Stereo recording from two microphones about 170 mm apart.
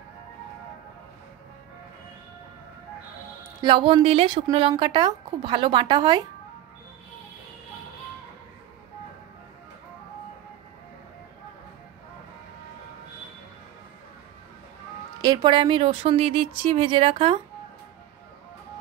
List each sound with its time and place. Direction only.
3.6 s a woman's voice: 30° right (ahead or behind)
15.2 s speech: 25° right (ahead or behind)